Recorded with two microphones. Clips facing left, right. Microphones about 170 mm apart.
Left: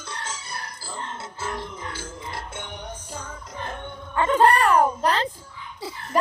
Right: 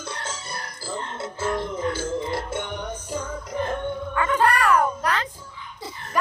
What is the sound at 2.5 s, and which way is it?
Music, 50° right (ahead or behind).